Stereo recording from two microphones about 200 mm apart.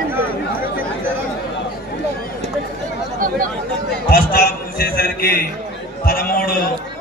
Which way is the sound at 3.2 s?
45° right (ahead or behind).